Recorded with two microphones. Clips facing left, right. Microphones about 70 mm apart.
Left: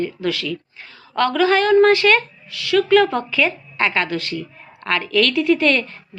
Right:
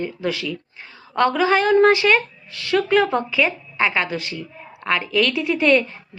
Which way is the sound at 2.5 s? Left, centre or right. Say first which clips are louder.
Left 3 dB; right.